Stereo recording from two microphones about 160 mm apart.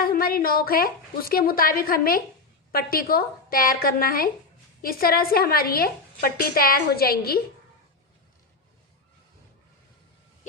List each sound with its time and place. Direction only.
0.0 s a woman's voice: 65° left (ahead or behind)